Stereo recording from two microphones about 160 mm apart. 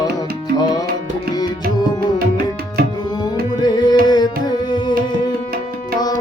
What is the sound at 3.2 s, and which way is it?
Tabla, 25° left (ahead or behind).